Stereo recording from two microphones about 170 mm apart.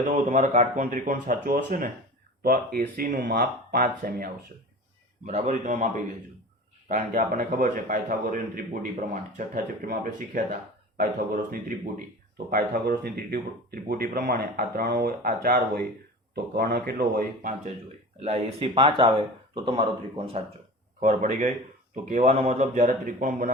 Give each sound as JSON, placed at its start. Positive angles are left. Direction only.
{"t": 0.1, "sound": "a man's voice", "side_deg": -45}
{"t": 2.9, "sound": "speech", "side_deg": -55}
{"t": 5.2, "sound": "a man's voice", "side_deg": -45}
{"t": 16.3, "sound": "speech", "side_deg": -70}
{"t": 18.2, "sound": "speech", "side_deg": -35}
{"t": 21.0, "sound": "a man's voice", "side_deg": -45}